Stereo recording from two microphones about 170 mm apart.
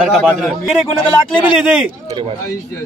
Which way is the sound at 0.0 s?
Centre (ahead or behind).